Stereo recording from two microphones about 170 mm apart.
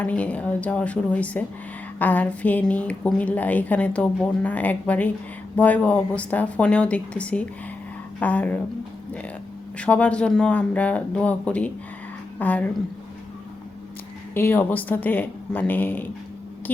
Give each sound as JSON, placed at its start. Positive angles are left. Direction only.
{"t": 0.0, "sound": "a woman's voice", "side_deg": 10}
{"t": 9.7, "sound": "a woman's voice", "side_deg": 5}
{"t": 14.3, "sound": "a woman's voice", "side_deg": 10}